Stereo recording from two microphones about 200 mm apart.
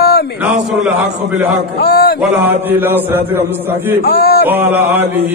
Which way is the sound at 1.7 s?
50° left (ahead or behind).